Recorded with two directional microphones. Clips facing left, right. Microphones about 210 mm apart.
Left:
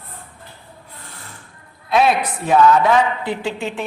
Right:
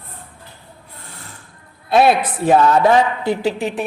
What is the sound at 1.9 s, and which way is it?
Speech, 35° right (ahead or behind).